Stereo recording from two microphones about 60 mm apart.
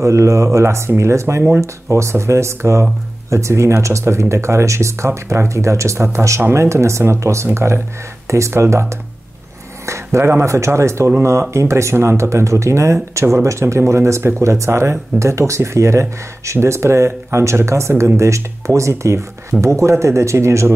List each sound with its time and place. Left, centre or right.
0.0 s speech: right